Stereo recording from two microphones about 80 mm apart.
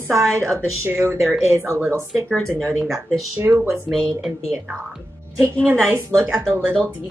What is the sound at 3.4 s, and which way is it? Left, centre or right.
Speech, right.